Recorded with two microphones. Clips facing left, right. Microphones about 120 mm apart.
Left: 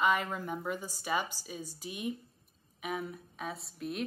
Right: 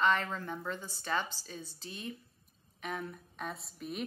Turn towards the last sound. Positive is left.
turn(degrees=0)  # may be behind; listen again after turning